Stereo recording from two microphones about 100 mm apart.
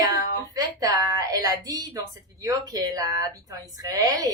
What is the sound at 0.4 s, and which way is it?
Speech, 35° right (ahead or behind).